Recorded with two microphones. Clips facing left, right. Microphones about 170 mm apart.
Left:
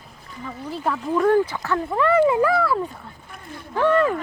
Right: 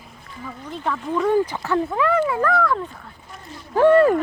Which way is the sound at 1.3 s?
15° right (ahead or behind).